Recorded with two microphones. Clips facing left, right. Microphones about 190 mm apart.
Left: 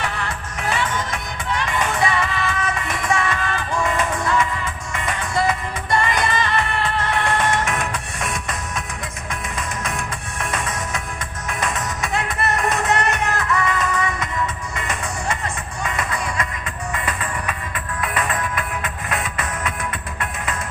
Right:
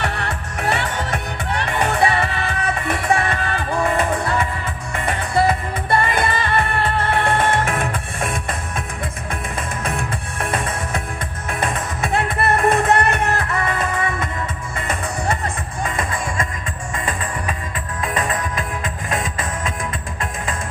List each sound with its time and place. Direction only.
0.0 s music: 65° right (ahead or behind)
15.8 s music: 30° right (ahead or behind)